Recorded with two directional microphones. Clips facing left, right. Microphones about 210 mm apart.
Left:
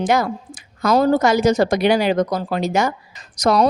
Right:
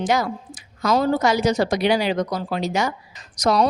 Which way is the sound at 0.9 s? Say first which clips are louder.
Left 4 dB; 45° left (ahead or behind).